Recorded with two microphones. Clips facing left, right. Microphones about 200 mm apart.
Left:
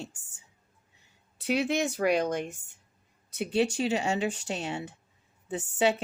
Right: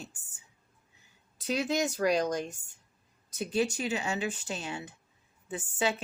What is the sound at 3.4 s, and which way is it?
Speech, 30° left (ahead or behind).